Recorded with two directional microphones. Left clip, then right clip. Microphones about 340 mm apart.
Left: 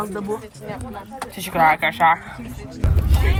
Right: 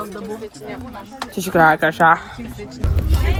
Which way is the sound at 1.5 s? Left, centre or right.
Right.